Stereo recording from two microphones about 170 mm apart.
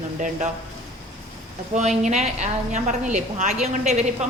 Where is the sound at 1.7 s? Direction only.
40° right (ahead or behind).